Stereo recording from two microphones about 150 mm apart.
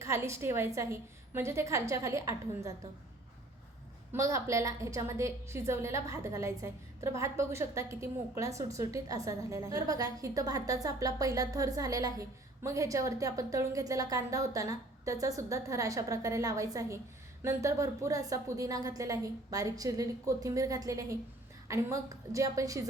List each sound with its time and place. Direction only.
0.0 s a woman's voice: 20° right (ahead or behind)
4.1 s a woman's voice: 20° right (ahead or behind)